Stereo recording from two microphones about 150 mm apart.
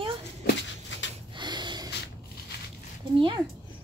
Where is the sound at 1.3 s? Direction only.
30° right (ahead or behind).